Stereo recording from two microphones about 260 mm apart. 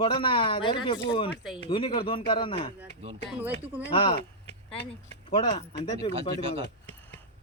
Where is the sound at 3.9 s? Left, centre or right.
Centre.